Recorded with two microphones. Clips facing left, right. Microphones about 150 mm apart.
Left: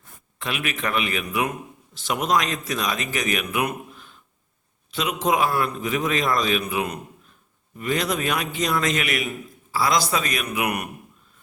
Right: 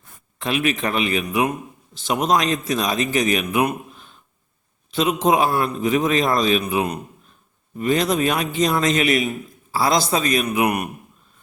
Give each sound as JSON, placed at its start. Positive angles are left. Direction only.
{"t": 0.3, "sound": "a man's voice", "side_deg": -30}
{"t": 3.7, "sound": "a sound", "side_deg": -25}
{"t": 4.9, "sound": "a man's voice", "side_deg": -30}